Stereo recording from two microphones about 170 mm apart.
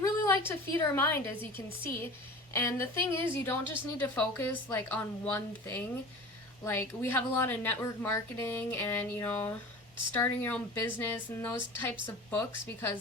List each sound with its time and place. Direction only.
0.4 s a woman's voice: 15° left (ahead or behind)